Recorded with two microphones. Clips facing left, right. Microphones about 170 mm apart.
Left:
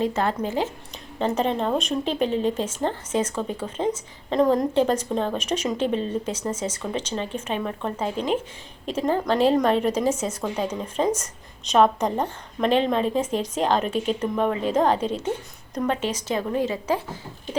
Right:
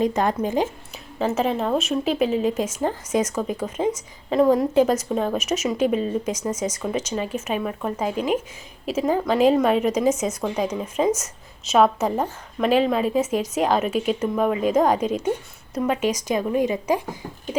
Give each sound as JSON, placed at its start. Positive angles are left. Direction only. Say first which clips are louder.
{"t": 0.0, "sound": "a woman's voice", "louder": "right 3 dB", "side_deg": -15}
{"t": 1.2, "sound": "a woman's voice", "louder": "right 1 dB", "side_deg": -5}